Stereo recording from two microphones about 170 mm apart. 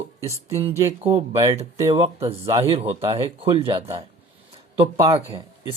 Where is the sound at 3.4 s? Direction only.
35° right (ahead or behind).